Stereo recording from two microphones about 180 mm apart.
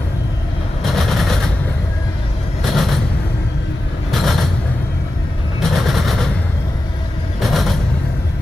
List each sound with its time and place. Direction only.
0.8 s vehicle: centre (ahead or behind)
2.6 s a sound: centre (ahead or behind)
4.1 s vehicle: centre (ahead or behind)
5.6 s vehicle: centre (ahead or behind)
7.3 s train: centre (ahead or behind)